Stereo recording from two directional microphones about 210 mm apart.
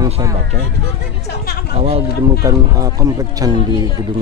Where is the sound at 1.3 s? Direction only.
50° left (ahead or behind).